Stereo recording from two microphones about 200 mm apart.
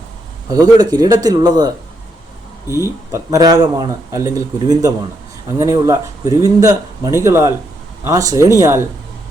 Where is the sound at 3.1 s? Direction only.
15° right (ahead or behind).